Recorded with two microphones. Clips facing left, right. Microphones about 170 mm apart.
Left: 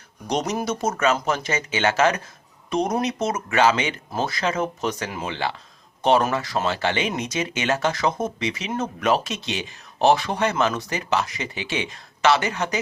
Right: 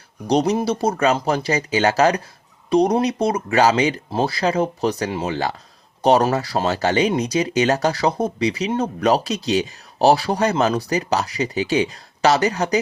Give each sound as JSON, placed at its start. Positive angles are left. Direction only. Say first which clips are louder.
{"t": 0.3, "sound": "speech", "louder": "right 6 dB", "side_deg": -30}